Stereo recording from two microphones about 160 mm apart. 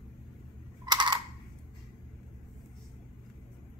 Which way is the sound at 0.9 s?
30° right (ahead or behind).